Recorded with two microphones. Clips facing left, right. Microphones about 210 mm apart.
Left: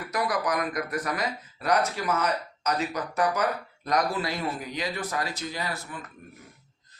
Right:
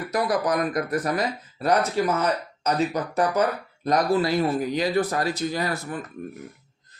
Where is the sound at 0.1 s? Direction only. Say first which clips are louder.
Right 4 dB; 30° right (ahead or behind); by 6.0 s 45° right (ahead or behind).